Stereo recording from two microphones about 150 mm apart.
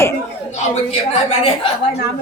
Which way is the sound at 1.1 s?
40° left (ahead or behind).